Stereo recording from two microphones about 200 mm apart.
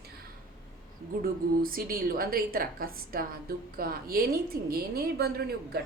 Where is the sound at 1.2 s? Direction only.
45° right (ahead or behind).